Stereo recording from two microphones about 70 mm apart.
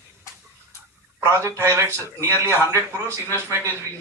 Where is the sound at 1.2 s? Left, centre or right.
Right.